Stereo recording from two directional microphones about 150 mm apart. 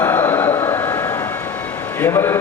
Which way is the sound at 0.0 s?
15° left (ahead or behind).